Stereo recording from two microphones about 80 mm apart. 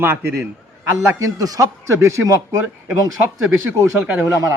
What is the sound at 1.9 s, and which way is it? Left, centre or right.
A man's voice, right.